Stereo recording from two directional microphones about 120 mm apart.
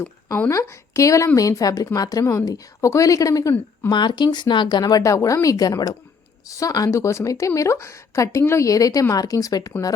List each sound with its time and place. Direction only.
0.3 s speech: 15° left (ahead or behind)
0.5 s a woman's voice: 25° left (ahead or behind)
3.8 s a woman's voice: 40° left (ahead or behind)